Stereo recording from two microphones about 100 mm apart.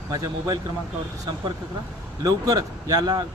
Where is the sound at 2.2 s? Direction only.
40° right (ahead or behind).